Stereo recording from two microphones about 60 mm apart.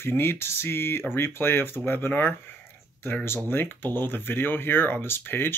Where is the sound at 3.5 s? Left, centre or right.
Left.